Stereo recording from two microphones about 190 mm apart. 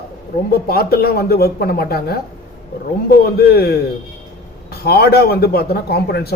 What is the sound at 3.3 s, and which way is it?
A man's voice, 55° left (ahead or behind).